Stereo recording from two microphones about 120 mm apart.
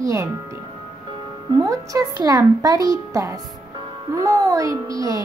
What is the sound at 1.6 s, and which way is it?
A child's voice, 30° right (ahead or behind).